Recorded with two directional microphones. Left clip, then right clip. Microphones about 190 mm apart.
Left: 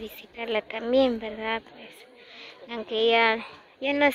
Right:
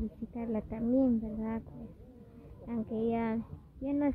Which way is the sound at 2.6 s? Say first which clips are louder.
Left 10 dB; 5° left (ahead or behind).